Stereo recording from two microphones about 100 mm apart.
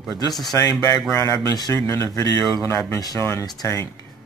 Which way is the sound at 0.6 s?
35° left (ahead or behind).